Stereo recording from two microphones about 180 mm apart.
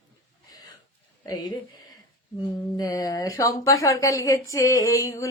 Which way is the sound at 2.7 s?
20° left (ahead or behind).